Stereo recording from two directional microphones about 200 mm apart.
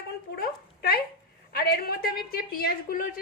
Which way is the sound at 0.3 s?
50° left (ahead or behind).